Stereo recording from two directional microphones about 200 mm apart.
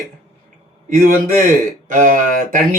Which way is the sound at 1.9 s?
40° right (ahead or behind).